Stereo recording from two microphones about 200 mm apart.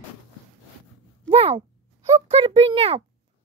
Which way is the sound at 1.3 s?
30° right (ahead or behind).